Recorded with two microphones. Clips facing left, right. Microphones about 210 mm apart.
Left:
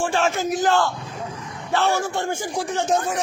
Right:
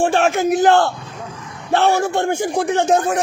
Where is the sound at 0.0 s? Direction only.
60° right (ahead or behind).